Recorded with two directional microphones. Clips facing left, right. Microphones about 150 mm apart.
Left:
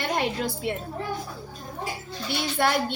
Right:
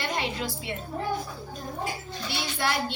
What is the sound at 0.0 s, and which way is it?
Speech, 50° left (ahead or behind).